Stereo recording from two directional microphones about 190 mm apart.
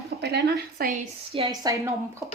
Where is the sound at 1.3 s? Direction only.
30° right (ahead or behind).